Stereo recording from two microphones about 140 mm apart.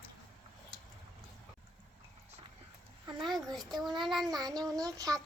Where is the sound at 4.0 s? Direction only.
Centre (ahead or behind).